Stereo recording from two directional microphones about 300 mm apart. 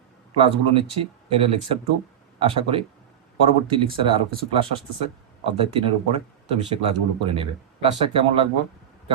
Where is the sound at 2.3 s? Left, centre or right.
Centre.